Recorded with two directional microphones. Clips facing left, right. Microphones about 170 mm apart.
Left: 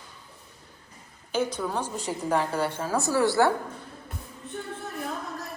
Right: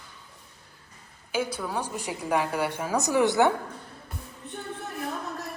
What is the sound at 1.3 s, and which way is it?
A woman's voice, 10° right (ahead or behind).